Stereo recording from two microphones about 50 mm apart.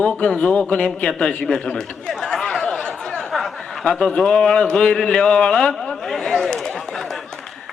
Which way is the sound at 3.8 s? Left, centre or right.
Centre.